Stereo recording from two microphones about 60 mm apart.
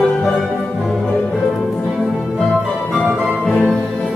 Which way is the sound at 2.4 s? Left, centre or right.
Centre.